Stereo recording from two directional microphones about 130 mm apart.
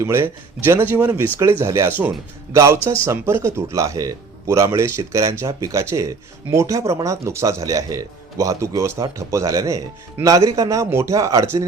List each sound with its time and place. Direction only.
0.0 s speech: 20° right (ahead or behind)